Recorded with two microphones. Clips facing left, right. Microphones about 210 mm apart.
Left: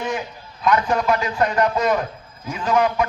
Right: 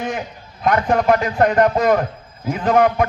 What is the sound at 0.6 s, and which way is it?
A man's voice, 55° right (ahead or behind).